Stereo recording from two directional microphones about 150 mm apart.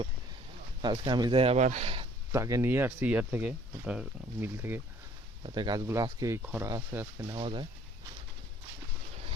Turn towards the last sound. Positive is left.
turn(degrees=-35)  # may be behind; listen again after turning